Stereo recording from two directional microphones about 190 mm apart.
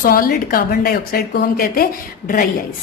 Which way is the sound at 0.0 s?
50° left (ahead or behind).